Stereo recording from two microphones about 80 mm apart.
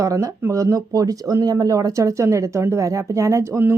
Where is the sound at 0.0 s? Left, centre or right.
Right.